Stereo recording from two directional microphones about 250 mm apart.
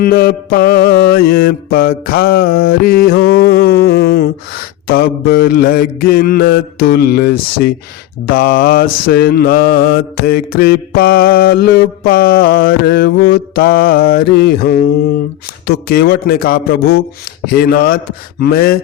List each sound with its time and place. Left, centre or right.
0.0 s mantra: left
15.9 s mantra: left